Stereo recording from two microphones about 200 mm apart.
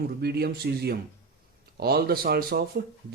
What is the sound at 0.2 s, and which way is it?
Speech, 55° right (ahead or behind).